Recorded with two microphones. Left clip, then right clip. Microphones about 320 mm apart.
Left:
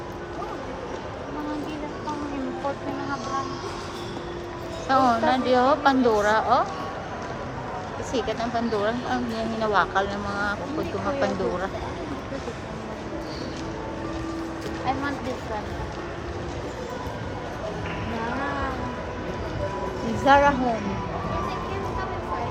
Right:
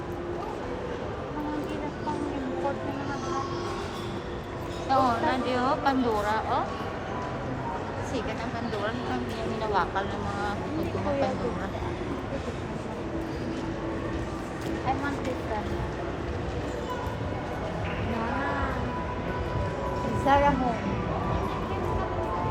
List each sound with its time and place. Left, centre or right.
4.9 s speech: left
9.7 s speech: centre
20.2 s music: left